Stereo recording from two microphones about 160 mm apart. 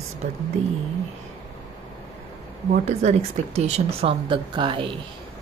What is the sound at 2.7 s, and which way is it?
Speech, 45° right (ahead or behind).